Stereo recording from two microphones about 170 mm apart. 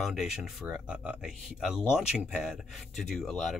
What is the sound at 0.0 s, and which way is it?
Speech, centre (ahead or behind).